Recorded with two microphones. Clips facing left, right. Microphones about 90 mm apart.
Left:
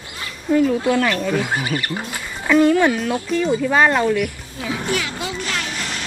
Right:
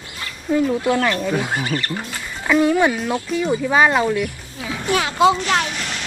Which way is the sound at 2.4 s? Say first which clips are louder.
Left 2 dB; 5° right (ahead or behind).